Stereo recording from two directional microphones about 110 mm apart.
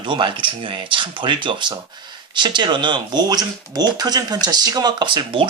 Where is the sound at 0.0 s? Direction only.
45° right (ahead or behind).